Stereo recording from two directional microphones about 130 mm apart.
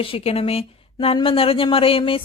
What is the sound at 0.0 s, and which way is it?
Speech, 45° left (ahead or behind).